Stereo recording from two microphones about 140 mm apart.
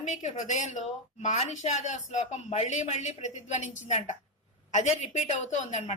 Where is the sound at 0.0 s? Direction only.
55° left (ahead or behind).